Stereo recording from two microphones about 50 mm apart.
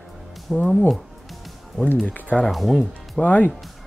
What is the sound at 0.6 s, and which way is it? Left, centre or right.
Speech, left.